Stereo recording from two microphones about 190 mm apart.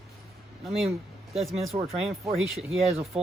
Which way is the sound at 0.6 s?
5° right (ahead or behind).